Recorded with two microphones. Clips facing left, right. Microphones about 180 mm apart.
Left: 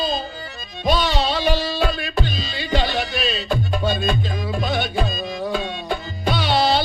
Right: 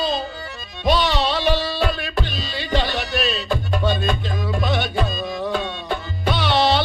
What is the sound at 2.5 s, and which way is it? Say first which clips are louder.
Music: even; 45° left (ahead or behind).